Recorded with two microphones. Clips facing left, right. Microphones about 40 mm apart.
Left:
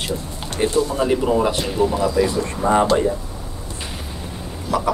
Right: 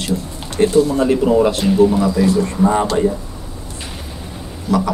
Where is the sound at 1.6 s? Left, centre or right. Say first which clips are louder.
Right 6 dB; centre.